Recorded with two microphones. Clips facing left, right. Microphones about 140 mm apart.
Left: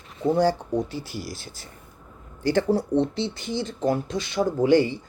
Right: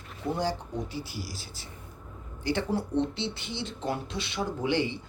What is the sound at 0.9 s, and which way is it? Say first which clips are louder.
Speech: left 4 dB; 10° right (ahead or behind).